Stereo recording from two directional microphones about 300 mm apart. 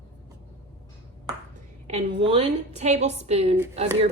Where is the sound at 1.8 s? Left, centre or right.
Centre.